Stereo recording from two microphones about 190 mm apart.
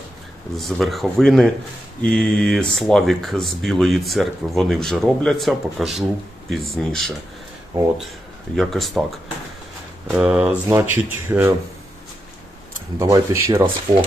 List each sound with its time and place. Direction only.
0.5 s speech: centre (ahead or behind)
8.5 s speech: centre (ahead or behind)
10.1 s speech: 5° right (ahead or behind)
13.0 s speech: 15° right (ahead or behind)